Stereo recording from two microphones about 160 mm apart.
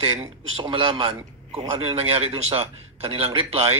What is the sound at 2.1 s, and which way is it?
A woman's voice, 40° right (ahead or behind).